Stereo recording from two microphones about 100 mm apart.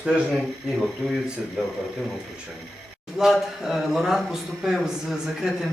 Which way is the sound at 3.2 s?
5° right (ahead or behind).